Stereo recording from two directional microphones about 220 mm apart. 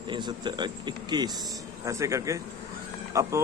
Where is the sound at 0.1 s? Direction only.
20° right (ahead or behind).